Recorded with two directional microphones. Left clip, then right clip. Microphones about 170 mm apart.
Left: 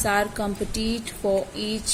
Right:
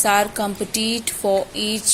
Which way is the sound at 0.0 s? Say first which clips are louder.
Right 5 dB; 15° right (ahead or behind).